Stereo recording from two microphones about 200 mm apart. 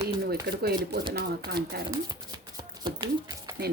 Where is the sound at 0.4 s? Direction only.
50° right (ahead or behind).